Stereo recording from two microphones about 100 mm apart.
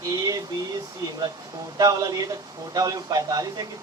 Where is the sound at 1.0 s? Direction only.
35° right (ahead or behind).